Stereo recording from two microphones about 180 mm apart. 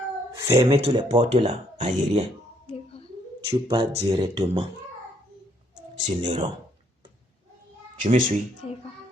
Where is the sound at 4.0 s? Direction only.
25° right (ahead or behind).